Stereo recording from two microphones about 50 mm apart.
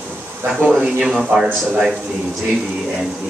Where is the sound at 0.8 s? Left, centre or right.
Right.